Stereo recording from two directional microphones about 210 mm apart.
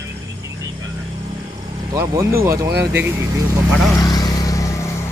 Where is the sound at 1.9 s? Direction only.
15° right (ahead or behind).